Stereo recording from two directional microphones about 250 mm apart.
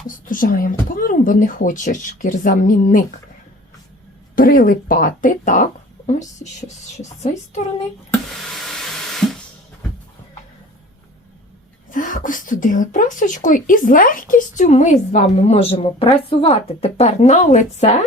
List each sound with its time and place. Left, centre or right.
0.3 s speech: left
4.4 s a woman's voice: left
8.5 s a sound: centre
11.9 s speech: left